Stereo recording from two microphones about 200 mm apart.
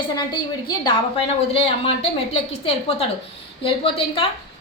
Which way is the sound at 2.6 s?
30° left (ahead or behind).